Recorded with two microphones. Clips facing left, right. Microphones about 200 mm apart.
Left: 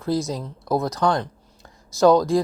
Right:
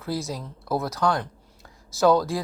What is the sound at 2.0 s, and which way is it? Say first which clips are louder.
Speech: left 4 dB; 15° left (ahead or behind).